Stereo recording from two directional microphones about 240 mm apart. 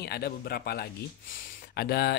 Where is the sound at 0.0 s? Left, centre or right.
Left.